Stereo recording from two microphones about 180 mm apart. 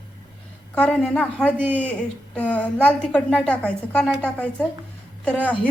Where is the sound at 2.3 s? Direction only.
10° left (ahead or behind).